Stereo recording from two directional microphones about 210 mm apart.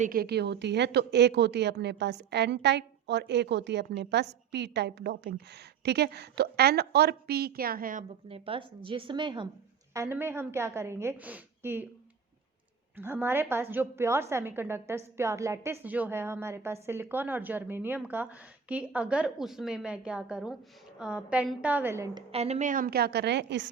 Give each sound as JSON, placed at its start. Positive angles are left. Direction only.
{"t": 0.0, "sound": "a woman's voice", "side_deg": -45}
{"t": 8.3, "sound": "a woman's voice", "side_deg": -25}
{"t": 9.9, "sound": "a woman's voice", "side_deg": -10}
{"t": 13.0, "sound": "a woman's voice", "side_deg": -10}
{"t": 22.3, "sound": "a woman's voice", "side_deg": -30}